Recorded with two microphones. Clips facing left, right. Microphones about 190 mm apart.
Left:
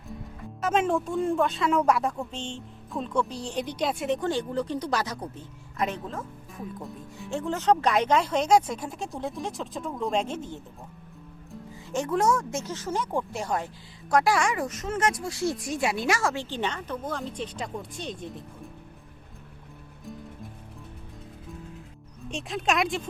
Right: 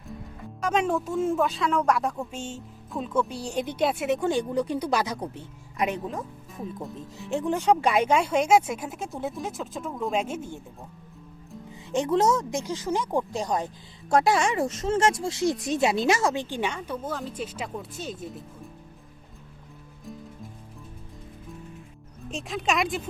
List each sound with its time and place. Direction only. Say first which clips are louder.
0.6 s speech: even; centre (ahead or behind); by 6.0 s 15° right (ahead or behind)
7.2 s speech: right 3 dB; 15° right (ahead or behind)
11.7 s speech: right 3 dB; 20° right (ahead or behind)
22.3 s speech: even; centre (ahead or behind)